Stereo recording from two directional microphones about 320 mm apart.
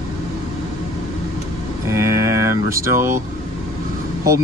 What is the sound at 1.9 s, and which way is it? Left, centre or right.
Speech, centre.